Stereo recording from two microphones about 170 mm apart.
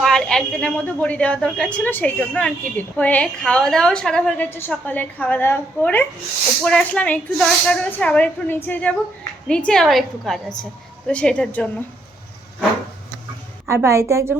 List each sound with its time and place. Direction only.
0.0 s a woman's voice: centre (ahead or behind)
13.7 s a woman's voice: 15° right (ahead or behind)